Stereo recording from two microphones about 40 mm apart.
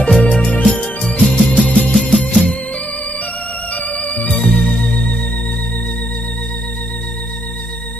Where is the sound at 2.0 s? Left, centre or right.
Left.